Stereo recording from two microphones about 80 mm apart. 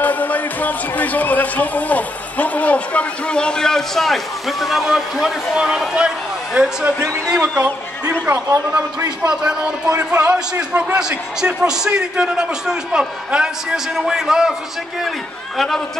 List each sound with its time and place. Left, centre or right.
0.0 s a man's voice: left; by 7.7 s centre
9.2 s a man's voice: centre